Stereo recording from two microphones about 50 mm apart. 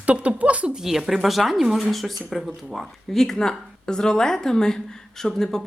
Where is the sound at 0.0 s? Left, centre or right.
Right.